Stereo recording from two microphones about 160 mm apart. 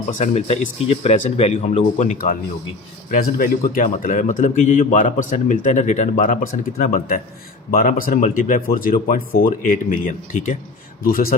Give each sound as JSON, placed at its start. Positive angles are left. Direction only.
{"t": 0.1, "sound": "a man's voice", "side_deg": 45}
{"t": 11.0, "sound": "speech", "side_deg": 65}